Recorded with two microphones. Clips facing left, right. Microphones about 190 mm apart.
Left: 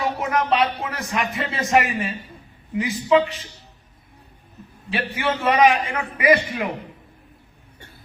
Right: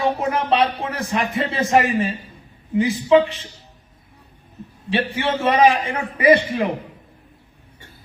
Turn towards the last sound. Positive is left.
turn(degrees=-30)  # may be behind; listen again after turning